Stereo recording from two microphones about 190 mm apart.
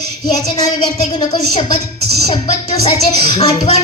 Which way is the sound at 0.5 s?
20° left (ahead or behind).